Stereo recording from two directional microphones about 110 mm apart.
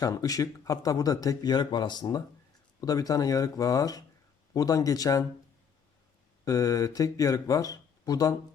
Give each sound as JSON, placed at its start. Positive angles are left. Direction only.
{"t": 0.0, "sound": "speech", "side_deg": 35}
{"t": 6.4, "sound": "speech", "side_deg": 30}